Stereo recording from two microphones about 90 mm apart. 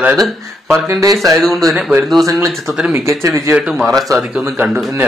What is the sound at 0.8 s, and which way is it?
Speech, 35° right (ahead or behind).